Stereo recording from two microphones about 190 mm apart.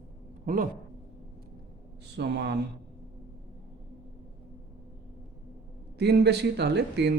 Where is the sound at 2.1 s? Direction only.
60° right (ahead or behind).